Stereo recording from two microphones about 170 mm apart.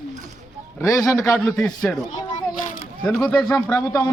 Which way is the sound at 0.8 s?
20° left (ahead or behind).